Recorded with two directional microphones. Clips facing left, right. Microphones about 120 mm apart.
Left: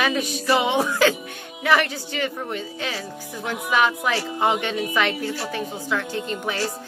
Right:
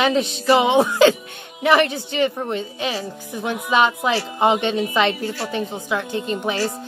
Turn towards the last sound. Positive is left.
turn(degrees=-20)  # may be behind; listen again after turning